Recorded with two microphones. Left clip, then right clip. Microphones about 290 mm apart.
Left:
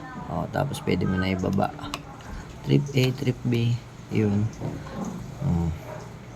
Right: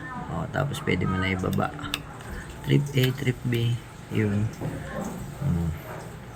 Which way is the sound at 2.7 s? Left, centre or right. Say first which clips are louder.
Left 1 dB; centre.